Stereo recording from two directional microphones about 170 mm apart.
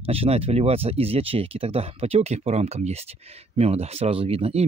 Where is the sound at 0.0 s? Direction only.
35° right (ahead or behind).